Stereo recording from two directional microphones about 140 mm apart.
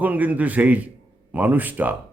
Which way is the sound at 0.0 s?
10° right (ahead or behind).